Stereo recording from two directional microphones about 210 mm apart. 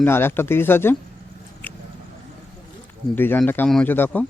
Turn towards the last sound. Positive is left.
turn(degrees=10)  # may be behind; listen again after turning